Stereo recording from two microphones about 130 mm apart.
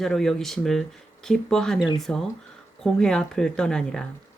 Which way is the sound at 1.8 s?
35° left (ahead or behind).